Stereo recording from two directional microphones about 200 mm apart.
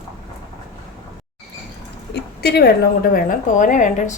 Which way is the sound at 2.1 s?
55° left (ahead or behind).